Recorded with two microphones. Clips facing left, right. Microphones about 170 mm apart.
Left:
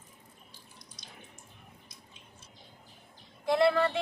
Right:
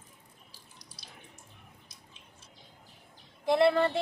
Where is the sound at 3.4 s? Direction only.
25° right (ahead or behind).